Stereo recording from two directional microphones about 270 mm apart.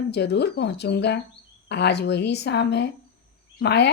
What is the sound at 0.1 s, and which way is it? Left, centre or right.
Speech, left.